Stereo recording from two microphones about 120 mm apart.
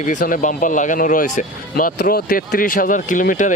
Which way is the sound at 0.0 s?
90° left.